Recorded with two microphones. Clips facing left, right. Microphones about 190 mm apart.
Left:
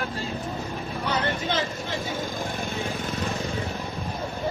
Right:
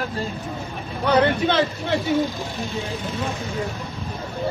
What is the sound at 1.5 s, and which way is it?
Speech, 65° right (ahead or behind).